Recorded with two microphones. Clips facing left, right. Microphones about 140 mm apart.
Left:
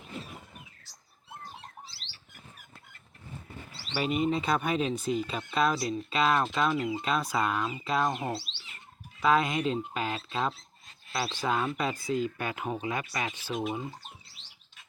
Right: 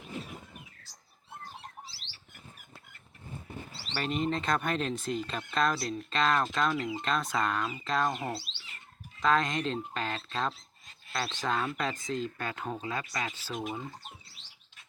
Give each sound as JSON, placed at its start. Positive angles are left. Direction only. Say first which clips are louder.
{"t": 3.9, "sound": "speech", "louder": "left 3 dB", "side_deg": 5}
{"t": 8.2, "sound": "speech", "louder": "left 2 dB", "side_deg": 20}
{"t": 9.2, "sound": "speech", "louder": "left 2 dB", "side_deg": 10}